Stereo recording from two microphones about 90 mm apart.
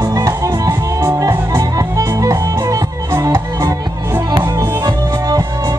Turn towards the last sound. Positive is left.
turn(degrees=-45)  # may be behind; listen again after turning